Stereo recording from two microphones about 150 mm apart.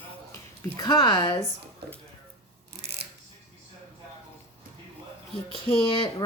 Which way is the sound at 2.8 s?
90° right.